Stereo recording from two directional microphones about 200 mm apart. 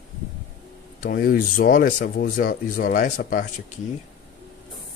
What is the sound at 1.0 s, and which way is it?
Speech, 45° left (ahead or behind).